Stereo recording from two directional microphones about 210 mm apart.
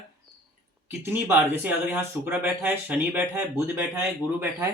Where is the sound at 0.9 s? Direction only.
10° right (ahead or behind).